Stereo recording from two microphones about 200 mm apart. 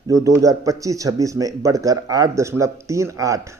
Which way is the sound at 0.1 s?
15° right (ahead or behind).